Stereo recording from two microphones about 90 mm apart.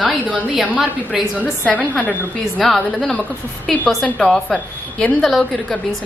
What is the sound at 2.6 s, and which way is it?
A woman's voice, 5° left (ahead or behind).